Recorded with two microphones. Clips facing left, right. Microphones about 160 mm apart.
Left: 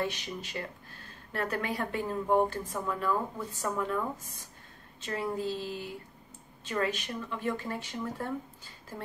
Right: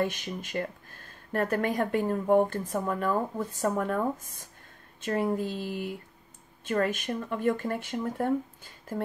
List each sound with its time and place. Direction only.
0.0 s speech: 50° right (ahead or behind)